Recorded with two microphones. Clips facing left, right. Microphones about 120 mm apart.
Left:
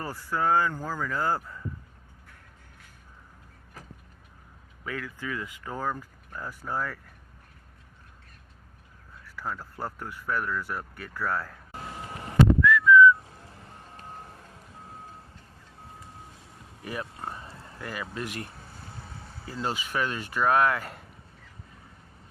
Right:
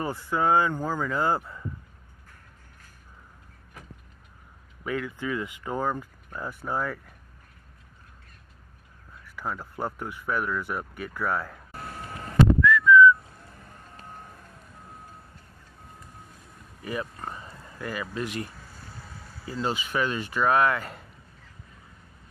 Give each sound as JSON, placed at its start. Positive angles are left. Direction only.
{"t": 0.0, "sound": "speech", "side_deg": -20}
{"t": 4.9, "sound": "speech", "side_deg": -25}
{"t": 9.3, "sound": "speech", "side_deg": -20}
{"t": 11.7, "sound": "vehicle", "side_deg": 15}
{"t": 12.6, "sound": "whistling", "side_deg": 5}
{"t": 13.4, "sound": "music", "side_deg": 25}
{"t": 16.8, "sound": "speech", "side_deg": 0}
{"t": 17.2, "sound": "oink", "side_deg": 5}
{"t": 18.5, "sound": "vehicle", "side_deg": 25}
{"t": 19.5, "sound": "speech", "side_deg": 0}